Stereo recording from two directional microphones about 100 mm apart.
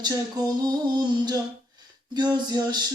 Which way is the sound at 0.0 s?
40° right (ahead or behind).